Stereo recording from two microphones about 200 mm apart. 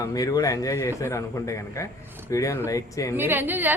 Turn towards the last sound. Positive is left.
turn(degrees=-10)  # may be behind; listen again after turning